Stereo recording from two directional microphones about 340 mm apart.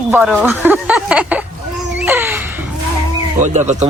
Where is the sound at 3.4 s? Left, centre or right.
Right.